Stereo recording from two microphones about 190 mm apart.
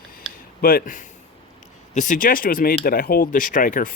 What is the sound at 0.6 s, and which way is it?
Speech, 45° left (ahead or behind).